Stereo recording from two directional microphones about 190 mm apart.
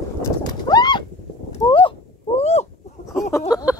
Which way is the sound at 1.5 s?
25° left (ahead or behind).